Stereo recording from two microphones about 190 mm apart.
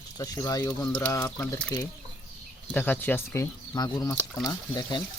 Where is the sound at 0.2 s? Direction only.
15° left (ahead or behind).